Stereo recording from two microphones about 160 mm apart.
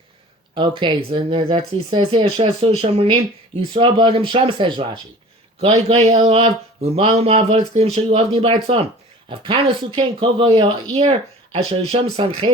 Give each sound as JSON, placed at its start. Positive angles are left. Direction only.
{"t": 0.5, "sound": "speech", "side_deg": -30}